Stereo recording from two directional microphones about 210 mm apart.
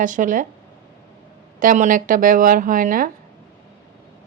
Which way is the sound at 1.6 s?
40° right (ahead or behind).